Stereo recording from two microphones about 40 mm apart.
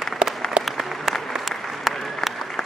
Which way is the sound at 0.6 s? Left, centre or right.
Centre.